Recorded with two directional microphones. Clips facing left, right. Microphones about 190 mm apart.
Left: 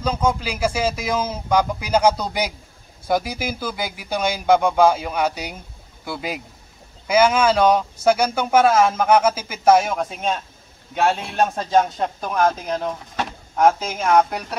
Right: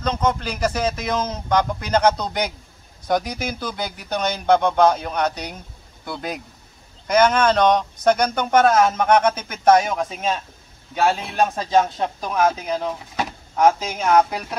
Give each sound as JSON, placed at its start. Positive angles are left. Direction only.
{"t": 0.0, "sound": "a man's voice", "side_deg": 10}